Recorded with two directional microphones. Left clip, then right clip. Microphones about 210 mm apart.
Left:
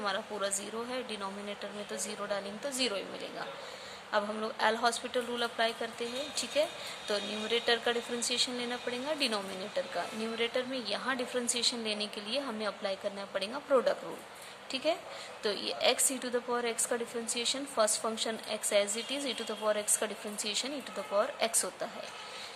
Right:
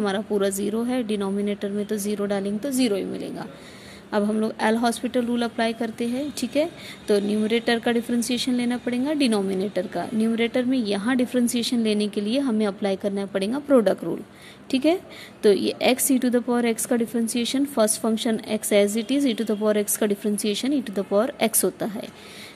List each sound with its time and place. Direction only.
0.0 s a woman's voice: 30° right (ahead or behind)